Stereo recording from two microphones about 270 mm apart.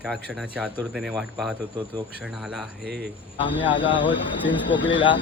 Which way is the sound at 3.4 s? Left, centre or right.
Centre.